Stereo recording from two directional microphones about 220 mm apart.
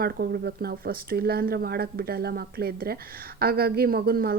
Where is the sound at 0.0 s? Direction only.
45° right (ahead or behind).